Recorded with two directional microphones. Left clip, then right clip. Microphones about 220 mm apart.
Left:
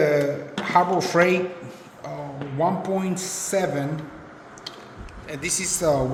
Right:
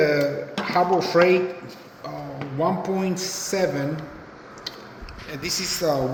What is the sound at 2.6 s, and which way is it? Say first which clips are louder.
Speech: even; 35° left (ahead or behind).